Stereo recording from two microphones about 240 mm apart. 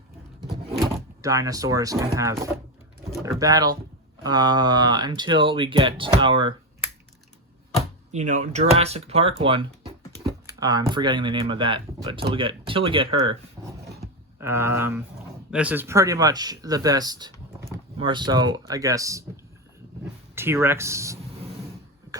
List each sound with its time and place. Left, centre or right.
1.2 s speech: centre
3.2 s speech: centre
8.1 s speech: right
14.3 s speech: centre
20.3 s speech: centre